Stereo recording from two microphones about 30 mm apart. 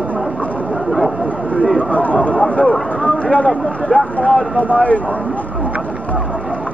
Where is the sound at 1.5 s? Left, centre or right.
Left.